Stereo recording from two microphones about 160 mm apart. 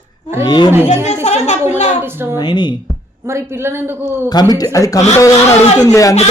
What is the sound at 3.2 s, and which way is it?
A man's voice, 15° right (ahead or behind).